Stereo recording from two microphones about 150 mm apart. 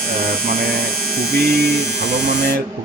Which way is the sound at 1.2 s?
90° right.